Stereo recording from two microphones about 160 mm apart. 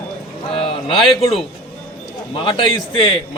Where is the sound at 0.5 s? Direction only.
30° left (ahead or behind).